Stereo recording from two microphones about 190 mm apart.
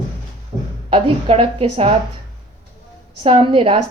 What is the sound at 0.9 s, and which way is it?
A woman's voice, 30° right (ahead or behind).